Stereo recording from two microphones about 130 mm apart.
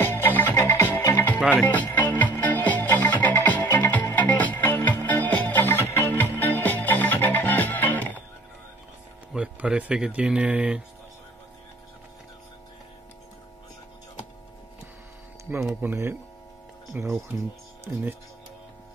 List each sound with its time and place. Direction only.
0.0 s music: 15° left (ahead or behind)
9.3 s speech: 10° right (ahead or behind)
15.7 s speech: 15° right (ahead or behind)